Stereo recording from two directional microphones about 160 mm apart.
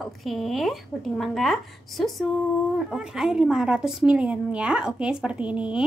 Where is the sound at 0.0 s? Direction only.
Centre (ahead or behind).